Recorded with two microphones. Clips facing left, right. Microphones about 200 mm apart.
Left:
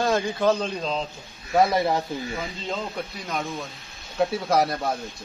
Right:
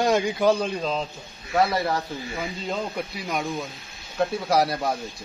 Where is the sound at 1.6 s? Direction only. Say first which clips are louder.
Left 2 dB; 20° left (ahead or behind).